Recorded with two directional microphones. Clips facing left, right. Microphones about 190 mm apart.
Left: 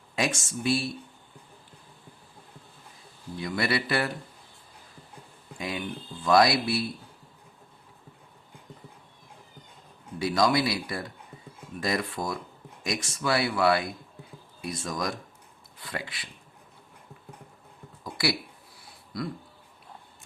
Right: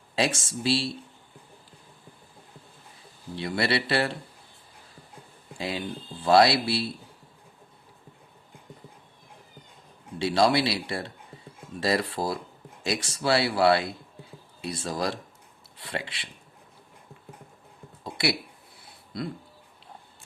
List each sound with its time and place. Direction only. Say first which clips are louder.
0.2 s speech: right 2 dB; 30° right (ahead or behind)
3.3 s speech: right 1 dB; 30° right (ahead or behind)
5.5 s speech: right 2 dB; 30° right (ahead or behind)
10.2 s speech: right 2 dB; 30° right (ahead or behind)
18.0 s a sound: right 1 dB; 25° right (ahead or behind)
19.1 s speech: even; 25° right (ahead or behind)